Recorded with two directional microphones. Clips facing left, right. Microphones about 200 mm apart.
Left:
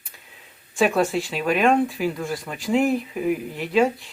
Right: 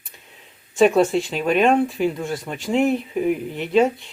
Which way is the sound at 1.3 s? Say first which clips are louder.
Right 2 dB; centre (ahead or behind).